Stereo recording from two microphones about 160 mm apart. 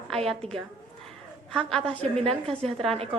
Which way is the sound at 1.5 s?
5° left (ahead or behind).